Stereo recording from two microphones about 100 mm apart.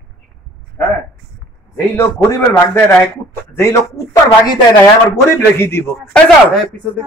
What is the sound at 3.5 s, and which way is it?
Speech, 30° left (ahead or behind).